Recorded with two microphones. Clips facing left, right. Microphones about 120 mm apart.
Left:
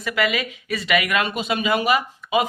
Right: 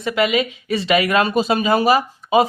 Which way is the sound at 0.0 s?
25° right (ahead or behind).